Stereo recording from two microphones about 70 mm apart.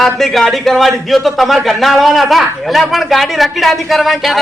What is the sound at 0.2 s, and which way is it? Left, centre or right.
A man's voice, centre.